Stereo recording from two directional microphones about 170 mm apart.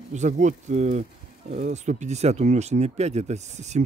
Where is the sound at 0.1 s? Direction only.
45° right (ahead or behind).